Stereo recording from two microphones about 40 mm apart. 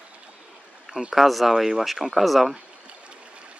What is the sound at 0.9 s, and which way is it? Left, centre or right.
Speech, centre.